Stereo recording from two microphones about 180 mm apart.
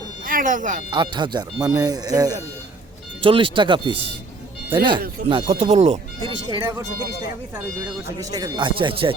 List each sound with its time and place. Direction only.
0.3 s speech: 50° right (ahead or behind)
0.9 s speech: 25° right (ahead or behind)
8.2 s speech: 20° right (ahead or behind)